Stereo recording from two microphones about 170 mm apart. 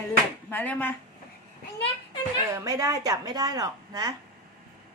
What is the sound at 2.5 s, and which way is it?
A woman's voice, 20° right (ahead or behind).